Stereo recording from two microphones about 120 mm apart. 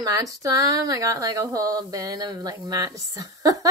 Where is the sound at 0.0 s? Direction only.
30° right (ahead or behind).